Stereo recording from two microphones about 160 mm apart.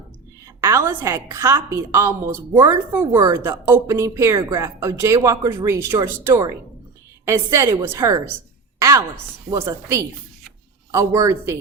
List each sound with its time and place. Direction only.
0.4 s a woman's voice: 15° right (ahead or behind)
8.8 s a sound: 20° right (ahead or behind)
9.5 s a woman's voice: 20° right (ahead or behind)